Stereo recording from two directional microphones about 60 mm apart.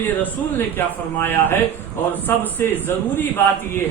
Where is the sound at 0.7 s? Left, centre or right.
Left.